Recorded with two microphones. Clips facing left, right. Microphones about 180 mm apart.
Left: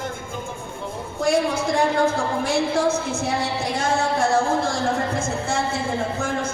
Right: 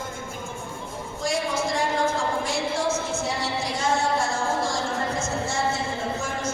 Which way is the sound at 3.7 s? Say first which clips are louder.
Left 2 dB; 60° left (ahead or behind).